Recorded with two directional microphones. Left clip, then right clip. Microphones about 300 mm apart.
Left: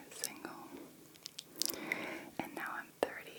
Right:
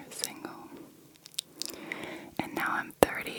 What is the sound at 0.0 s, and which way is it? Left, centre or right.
Whispering, right.